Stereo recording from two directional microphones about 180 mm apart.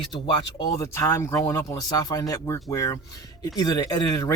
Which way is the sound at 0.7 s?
15° left (ahead or behind).